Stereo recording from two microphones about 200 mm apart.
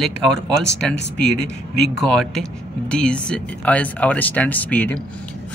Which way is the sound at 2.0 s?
5° left (ahead or behind).